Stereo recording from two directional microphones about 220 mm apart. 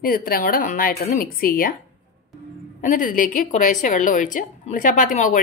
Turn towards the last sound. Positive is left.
turn(degrees=35)  # may be behind; listen again after turning